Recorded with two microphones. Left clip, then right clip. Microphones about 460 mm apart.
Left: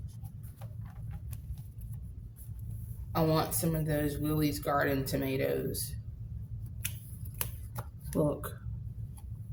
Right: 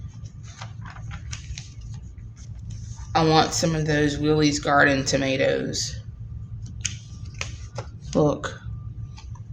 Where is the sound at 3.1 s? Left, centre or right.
Left.